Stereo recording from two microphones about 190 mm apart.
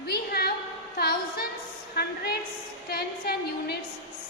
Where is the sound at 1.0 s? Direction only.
55° left (ahead or behind).